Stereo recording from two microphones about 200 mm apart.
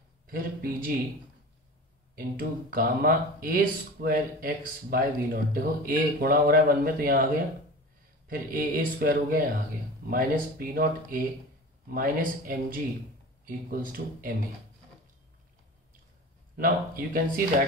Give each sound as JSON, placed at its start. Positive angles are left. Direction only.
{"t": 0.3, "sound": "speech", "side_deg": -45}
{"t": 2.1, "sound": "speech", "side_deg": -45}
{"t": 16.5, "sound": "speech", "side_deg": -45}